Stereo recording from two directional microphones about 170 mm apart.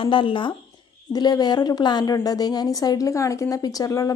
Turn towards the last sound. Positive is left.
turn(degrees=20)  # may be behind; listen again after turning